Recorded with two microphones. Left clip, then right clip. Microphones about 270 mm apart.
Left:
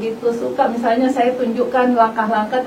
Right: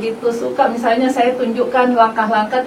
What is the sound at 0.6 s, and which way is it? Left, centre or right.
A woman's voice, centre.